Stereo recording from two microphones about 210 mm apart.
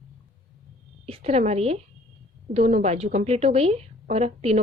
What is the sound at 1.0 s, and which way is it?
A woman's voice, 30° right (ahead or behind).